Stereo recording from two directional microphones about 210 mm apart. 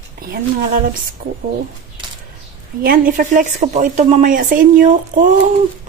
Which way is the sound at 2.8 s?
40° right (ahead or behind).